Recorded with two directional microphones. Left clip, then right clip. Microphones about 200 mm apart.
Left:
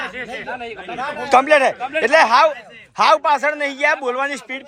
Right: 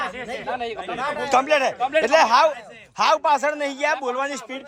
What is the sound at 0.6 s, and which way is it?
Speech, 55° right (ahead or behind).